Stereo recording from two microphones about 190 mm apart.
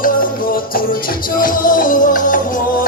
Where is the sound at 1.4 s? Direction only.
45° left (ahead or behind).